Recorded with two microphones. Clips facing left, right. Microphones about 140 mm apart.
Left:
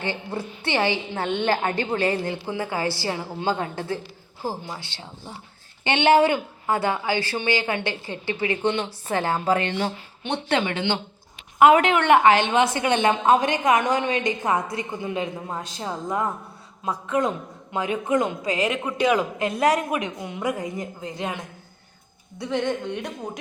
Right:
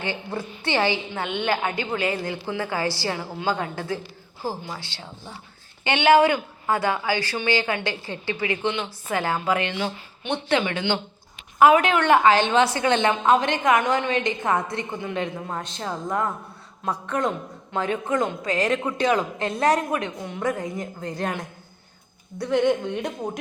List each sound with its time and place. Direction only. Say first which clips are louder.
0.0 s a woman's voice: even; 30° left (ahead or behind)
8.6 s a woman's voice: left 2 dB; 35° left (ahead or behind); by 21.1 s 10° left (ahead or behind)
21.2 s speech: right 2 dB; centre (ahead or behind)